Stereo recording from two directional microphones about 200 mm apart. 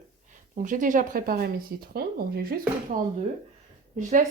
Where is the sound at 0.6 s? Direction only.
40° right (ahead or behind).